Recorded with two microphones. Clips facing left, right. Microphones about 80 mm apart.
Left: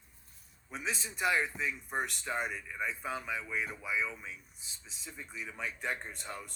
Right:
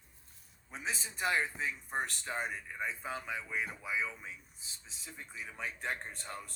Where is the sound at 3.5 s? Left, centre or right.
Centre.